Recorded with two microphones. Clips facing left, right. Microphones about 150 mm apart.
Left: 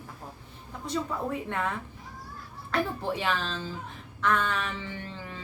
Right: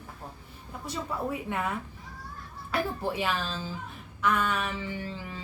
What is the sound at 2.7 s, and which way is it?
A child's voice, 10° right (ahead or behind).